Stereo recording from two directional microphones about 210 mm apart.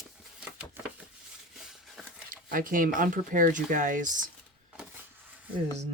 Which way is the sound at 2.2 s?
40° right (ahead or behind).